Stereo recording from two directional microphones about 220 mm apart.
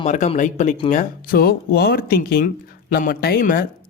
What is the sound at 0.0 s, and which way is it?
Speech, 30° left (ahead or behind).